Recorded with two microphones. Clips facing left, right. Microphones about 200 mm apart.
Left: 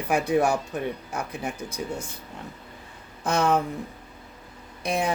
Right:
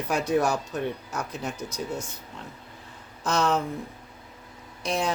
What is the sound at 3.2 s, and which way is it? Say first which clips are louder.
Speech: left 2 dB; 55° left (ahead or behind).